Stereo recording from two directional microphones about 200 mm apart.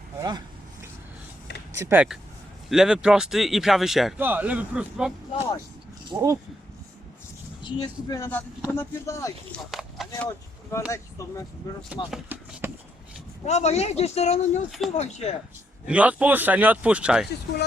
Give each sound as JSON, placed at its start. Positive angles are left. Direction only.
{"t": 0.2, "sound": "speech", "side_deg": -20}
{"t": 1.7, "sound": "speech", "side_deg": -10}
{"t": 6.1, "sound": "speech", "side_deg": -20}
{"t": 7.6, "sound": "speech", "side_deg": 20}
{"t": 9.7, "sound": "a sound", "side_deg": 0}
{"t": 10.2, "sound": "speech", "side_deg": 15}
{"t": 12.1, "sound": "speech", "side_deg": -10}
{"t": 13.4, "sound": "speech", "side_deg": 35}
{"t": 15.9, "sound": "speech", "side_deg": -5}